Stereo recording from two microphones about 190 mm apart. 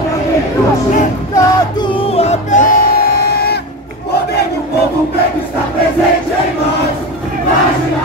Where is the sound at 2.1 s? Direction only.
35° left (ahead or behind).